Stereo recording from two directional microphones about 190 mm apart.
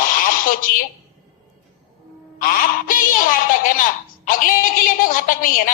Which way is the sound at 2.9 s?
45° left (ahead or behind).